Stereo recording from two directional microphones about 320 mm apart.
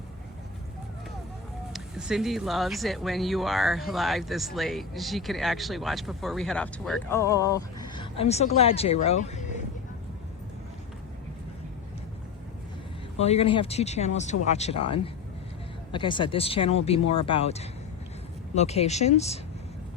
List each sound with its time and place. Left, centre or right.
1.7 s speech: centre; by 9.6 s left
13.1 s speech: centre